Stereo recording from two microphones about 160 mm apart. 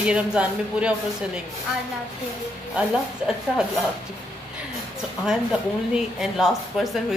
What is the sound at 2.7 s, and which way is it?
A woman's voice, 5° right (ahead or behind).